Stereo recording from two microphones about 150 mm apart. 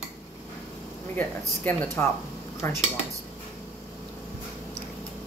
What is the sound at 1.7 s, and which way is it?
Speech, 10° left (ahead or behind).